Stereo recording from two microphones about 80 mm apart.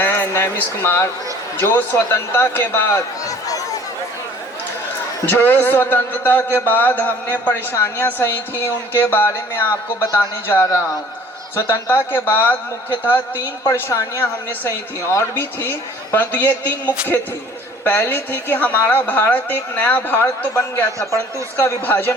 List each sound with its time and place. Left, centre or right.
0.0 s speech: left
3.2 s a sound: left
5.2 s speech: left
20.5 s a man's voice: left
21.8 s speech: left